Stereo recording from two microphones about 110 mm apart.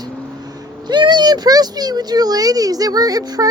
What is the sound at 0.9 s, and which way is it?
Speech, 40° right (ahead or behind).